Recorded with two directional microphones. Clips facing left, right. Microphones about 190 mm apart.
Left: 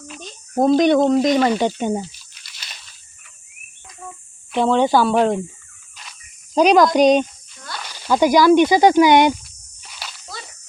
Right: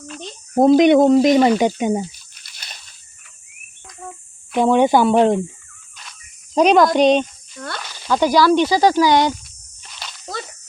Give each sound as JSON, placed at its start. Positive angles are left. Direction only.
{"t": 0.2, "sound": "a sound", "side_deg": -25}
{"t": 0.7, "sound": "speech", "side_deg": -20}
{"t": 4.5, "sound": "speech", "side_deg": -15}
{"t": 6.1, "sound": "snake", "side_deg": 0}
{"t": 7.9, "sound": "speech", "side_deg": 10}
{"t": 9.8, "sound": "a sound", "side_deg": 5}